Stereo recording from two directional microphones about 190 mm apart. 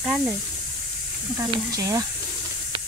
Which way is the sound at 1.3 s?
20° right (ahead or behind).